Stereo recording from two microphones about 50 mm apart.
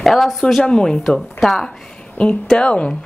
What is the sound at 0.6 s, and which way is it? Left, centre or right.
A woman's voice, centre.